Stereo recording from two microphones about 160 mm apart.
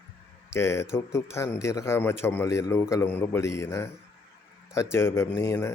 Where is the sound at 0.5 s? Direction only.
15° left (ahead or behind).